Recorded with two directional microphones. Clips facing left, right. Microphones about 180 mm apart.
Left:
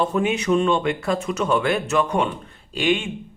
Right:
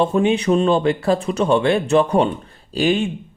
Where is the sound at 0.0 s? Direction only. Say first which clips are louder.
Right 5 dB; 25° right (ahead or behind).